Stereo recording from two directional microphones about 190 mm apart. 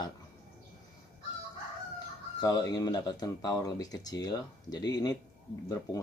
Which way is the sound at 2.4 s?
20° left (ahead or behind).